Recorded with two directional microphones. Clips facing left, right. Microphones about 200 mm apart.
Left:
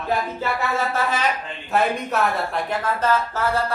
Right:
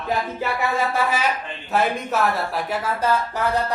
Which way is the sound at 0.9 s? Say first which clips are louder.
Right 1 dB; 10° right (ahead or behind).